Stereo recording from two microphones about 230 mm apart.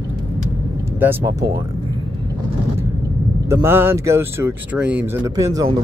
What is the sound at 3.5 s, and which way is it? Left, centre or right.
Speech, centre.